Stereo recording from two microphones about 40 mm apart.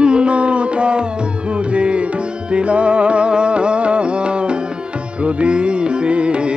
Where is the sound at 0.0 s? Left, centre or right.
Right.